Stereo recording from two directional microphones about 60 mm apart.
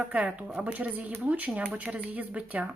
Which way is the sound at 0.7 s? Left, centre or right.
Right.